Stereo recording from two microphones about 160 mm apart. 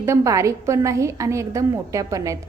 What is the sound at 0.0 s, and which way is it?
A woman's voice, 20° right (ahead or behind).